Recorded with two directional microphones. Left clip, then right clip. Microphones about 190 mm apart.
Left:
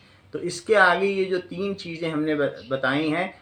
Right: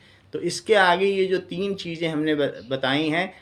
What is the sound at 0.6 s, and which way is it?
Speech, 20° right (ahead or behind).